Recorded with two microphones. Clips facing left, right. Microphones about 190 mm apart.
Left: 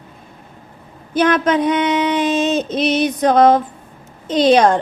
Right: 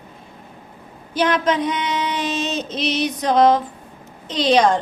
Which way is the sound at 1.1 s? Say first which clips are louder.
Left 4 dB; 55° left (ahead or behind).